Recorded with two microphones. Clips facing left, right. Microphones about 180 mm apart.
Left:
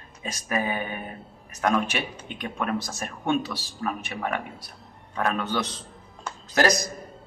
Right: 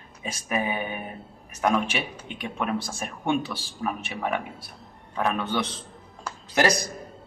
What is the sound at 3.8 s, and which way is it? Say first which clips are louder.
A man's voice: right 1 dB; 10° right (ahead or behind).